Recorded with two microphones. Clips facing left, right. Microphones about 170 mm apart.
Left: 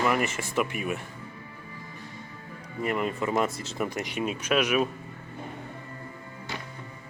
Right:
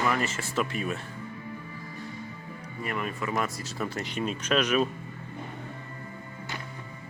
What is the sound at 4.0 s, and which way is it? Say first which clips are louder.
Speech: left 1 dB; 10° left (ahead or behind).